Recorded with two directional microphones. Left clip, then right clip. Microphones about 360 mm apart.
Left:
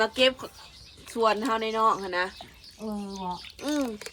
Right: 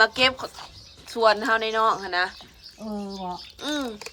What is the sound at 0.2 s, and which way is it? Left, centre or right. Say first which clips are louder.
A woman's voice: right 2 dB; centre.